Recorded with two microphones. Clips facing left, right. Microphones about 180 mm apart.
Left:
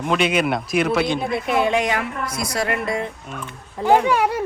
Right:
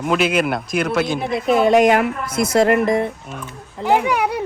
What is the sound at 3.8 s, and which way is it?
Speech, 5° right (ahead or behind).